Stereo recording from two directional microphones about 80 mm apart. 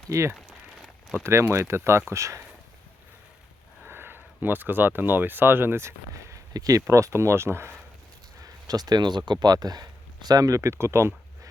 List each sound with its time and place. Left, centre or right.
0.1 s speech: right
0.3 s a sound: centre
1.2 s speech: right
3.8 s speech: right
8.4 s speech: right